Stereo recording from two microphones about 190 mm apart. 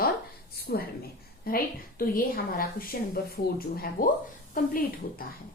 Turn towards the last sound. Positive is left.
turn(degrees=45)  # may be behind; listen again after turning